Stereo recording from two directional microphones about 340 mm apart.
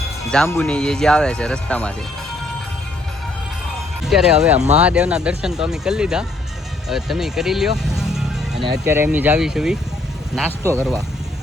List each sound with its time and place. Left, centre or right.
0.3 s speech: centre
4.0 s speech: centre
4.5 s speech: centre
4.8 s speech: centre